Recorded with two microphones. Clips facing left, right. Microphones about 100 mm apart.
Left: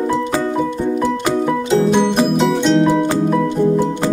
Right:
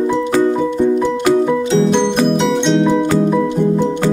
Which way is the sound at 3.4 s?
15° right (ahead or behind).